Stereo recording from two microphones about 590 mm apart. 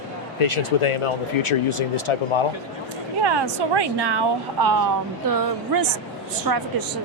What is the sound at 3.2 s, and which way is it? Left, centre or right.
A woman's voice, right.